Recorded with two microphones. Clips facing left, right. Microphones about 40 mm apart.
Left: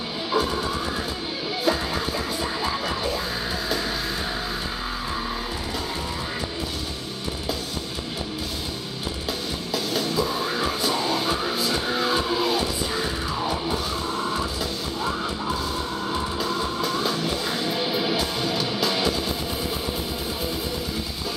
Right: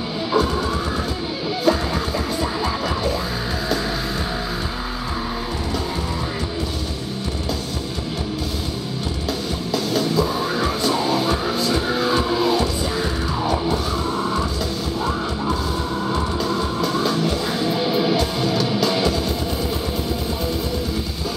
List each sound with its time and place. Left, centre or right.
0.3 s music: centre
9.7 s music: centre
16.1 s music: centre